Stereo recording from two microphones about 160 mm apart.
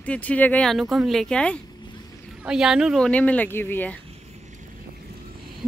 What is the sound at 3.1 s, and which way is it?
Speech, 10° left (ahead or behind).